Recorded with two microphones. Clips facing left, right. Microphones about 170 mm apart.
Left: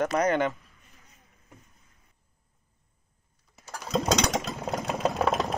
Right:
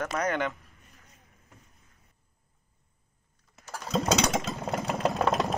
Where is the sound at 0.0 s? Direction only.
20° left (ahead or behind).